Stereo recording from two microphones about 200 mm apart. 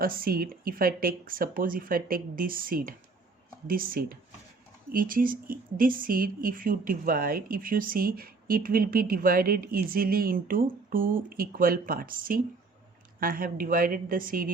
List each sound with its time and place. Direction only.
0.0 s speech: 45° right (ahead or behind)